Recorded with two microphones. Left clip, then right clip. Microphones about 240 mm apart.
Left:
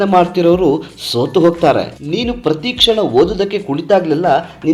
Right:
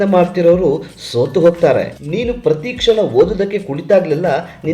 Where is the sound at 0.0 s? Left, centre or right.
Left.